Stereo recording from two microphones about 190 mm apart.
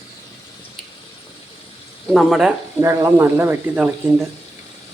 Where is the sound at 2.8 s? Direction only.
15° right (ahead or behind).